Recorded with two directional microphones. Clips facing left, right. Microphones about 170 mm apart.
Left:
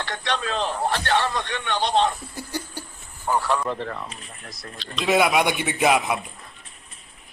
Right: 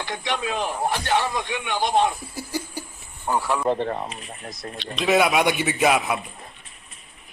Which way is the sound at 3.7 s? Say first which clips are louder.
Right 6 dB; 35° right (ahead or behind).